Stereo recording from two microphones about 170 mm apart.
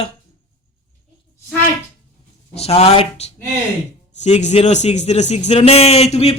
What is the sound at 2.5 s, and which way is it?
Speech, 35° left (ahead or behind).